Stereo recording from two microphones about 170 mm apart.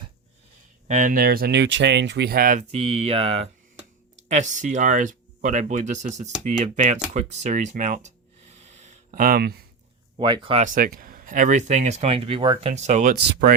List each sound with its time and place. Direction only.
0.9 s speech: 50° right (ahead or behind)
2.7 s a sound: 35° right (ahead or behind)
4.3 s speech: 45° right (ahead or behind)
7.1 s a sound: 40° right (ahead or behind); by 9.6 s 65° right (ahead or behind)
10.2 s speech: 25° right (ahead or behind)
10.6 s speech: 55° right (ahead or behind)